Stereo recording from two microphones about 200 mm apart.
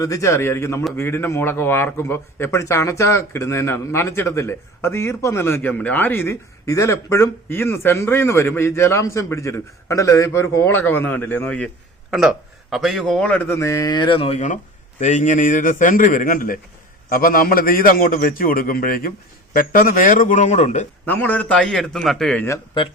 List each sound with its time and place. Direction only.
0.0 s a man's voice: 15° left (ahead or behind); by 20.8 s 35° left (ahead or behind)
21.1 s speech: 10° left (ahead or behind)